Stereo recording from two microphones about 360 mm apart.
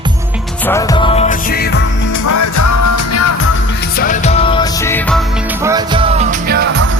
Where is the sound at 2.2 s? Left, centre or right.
Left.